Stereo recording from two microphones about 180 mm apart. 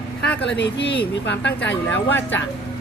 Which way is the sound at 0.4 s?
75° left (ahead or behind).